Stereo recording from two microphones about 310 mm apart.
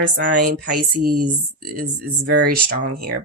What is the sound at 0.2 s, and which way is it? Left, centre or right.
Speech, right.